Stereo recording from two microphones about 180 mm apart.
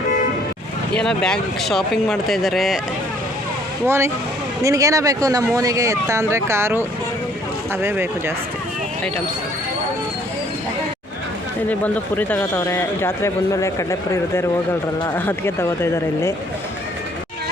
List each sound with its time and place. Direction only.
0.9 s speech: 5° left (ahead or behind)
3.8 s speech: 15° right (ahead or behind)
7.8 s speech: 15° right (ahead or behind)
11.7 s speech: 10° left (ahead or behind)